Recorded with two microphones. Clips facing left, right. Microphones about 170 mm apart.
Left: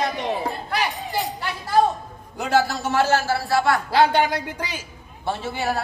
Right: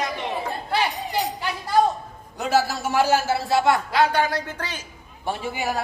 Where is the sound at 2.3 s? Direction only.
Centre (ahead or behind); by 3.8 s 20° right (ahead or behind).